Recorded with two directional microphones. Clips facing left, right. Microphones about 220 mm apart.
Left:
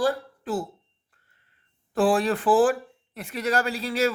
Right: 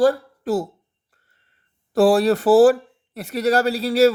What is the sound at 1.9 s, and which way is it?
Speech, 40° right (ahead or behind).